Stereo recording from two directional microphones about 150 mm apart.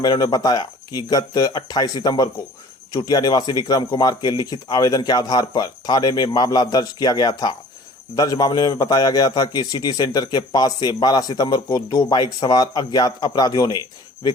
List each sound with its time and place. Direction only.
0.0 s a man's voice: 25° left (ahead or behind)